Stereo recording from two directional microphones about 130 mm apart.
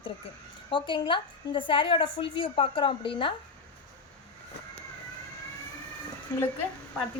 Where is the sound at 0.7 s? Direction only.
40° left (ahead or behind).